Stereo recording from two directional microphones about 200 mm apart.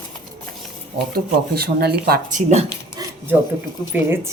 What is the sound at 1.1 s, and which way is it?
Speech, 50° right (ahead or behind).